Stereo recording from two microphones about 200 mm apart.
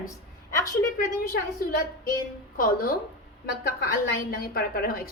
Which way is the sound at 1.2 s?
50° left (ahead or behind).